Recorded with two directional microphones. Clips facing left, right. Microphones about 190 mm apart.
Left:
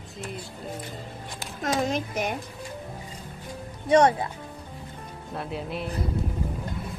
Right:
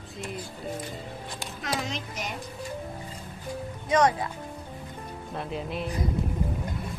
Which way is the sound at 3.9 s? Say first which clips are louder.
Left 4 dB; 30° left (ahead or behind).